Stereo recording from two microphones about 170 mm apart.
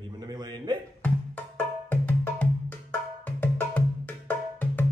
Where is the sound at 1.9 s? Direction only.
10° left (ahead or behind).